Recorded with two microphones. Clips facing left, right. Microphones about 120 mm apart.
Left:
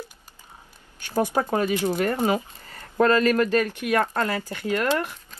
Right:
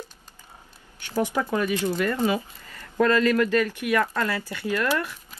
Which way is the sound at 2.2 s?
40° left (ahead or behind).